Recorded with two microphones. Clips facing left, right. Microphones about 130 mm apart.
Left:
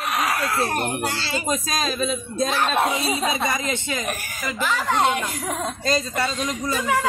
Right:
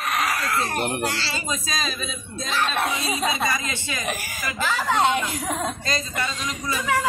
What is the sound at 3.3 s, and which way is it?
Speech, 20° left (ahead or behind).